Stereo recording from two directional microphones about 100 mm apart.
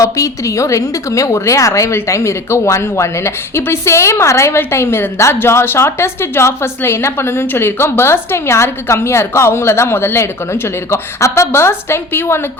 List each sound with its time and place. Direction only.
0.0 s a woman's voice: 30° left (ahead or behind)